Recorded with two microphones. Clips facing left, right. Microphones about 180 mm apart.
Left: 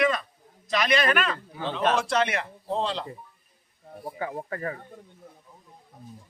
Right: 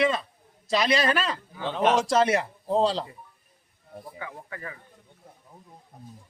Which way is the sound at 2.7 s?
35° right (ahead or behind).